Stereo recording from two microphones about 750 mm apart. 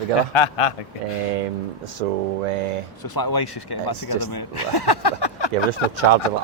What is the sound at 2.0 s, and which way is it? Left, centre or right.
Speech, right.